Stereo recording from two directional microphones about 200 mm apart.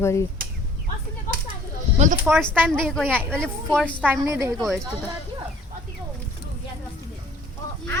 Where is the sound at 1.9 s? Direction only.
35° right (ahead or behind).